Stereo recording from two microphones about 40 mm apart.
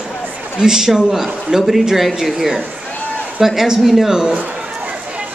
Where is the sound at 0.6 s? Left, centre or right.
Centre.